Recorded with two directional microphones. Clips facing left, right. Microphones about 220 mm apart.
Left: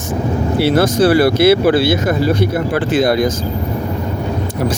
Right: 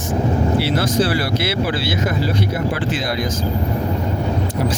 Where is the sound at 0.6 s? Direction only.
50° left (ahead or behind).